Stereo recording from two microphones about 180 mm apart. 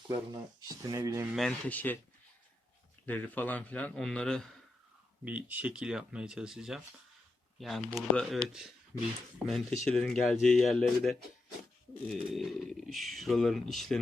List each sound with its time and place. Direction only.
0.8 s speech: 20° right (ahead or behind)
1.4 s a man's voice: 5° left (ahead or behind)
3.1 s a man's voice: 10° left (ahead or behind)
5.2 s speech: 10° right (ahead or behind)
9.5 s speech: centre (ahead or behind)